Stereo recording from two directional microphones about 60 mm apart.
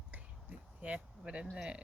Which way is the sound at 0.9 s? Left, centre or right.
Centre.